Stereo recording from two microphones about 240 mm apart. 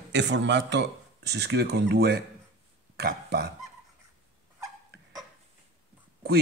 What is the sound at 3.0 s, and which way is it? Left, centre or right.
Burping, right.